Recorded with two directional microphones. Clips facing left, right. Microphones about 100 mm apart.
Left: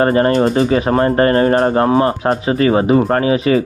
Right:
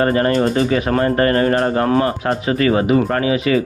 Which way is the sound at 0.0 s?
30° left (ahead or behind).